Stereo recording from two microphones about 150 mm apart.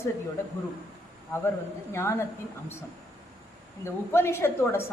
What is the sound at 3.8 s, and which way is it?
A woman's voice, 15° left (ahead or behind).